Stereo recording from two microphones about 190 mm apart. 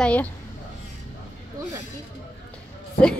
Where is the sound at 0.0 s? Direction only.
5° left (ahead or behind).